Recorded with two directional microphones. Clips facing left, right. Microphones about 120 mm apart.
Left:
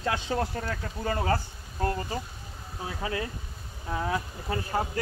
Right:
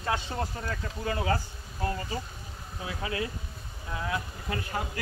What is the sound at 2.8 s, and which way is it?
Speech, 40° left (ahead or behind).